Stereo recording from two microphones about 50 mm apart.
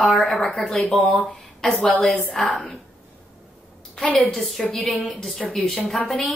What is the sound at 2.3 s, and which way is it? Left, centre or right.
Speech, centre.